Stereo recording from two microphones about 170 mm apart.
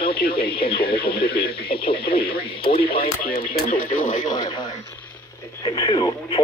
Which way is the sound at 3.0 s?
60° left (ahead or behind).